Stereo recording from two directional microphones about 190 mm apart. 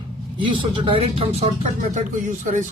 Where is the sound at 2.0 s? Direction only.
40° right (ahead or behind).